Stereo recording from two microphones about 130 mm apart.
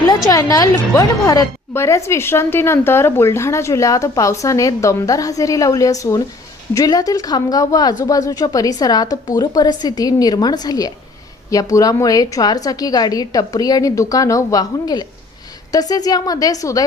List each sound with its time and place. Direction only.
0.3 s a woman's voice: 25° left (ahead or behind)